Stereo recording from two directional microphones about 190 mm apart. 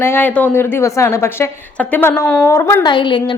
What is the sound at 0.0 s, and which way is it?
A woman's voice, 10° left (ahead or behind).